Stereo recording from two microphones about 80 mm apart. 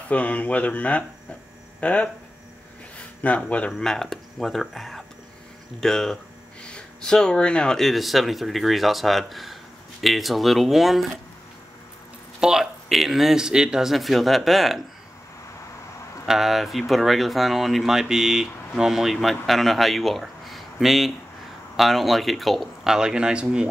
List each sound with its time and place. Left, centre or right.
0.1 s speech: centre
1.8 s hum: centre
3.0 s speech: centre
3.7 s speech: centre
12.4 s speech: centre
16.3 s speech: centre